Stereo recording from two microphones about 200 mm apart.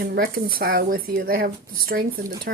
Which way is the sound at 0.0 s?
50° right (ahead or behind).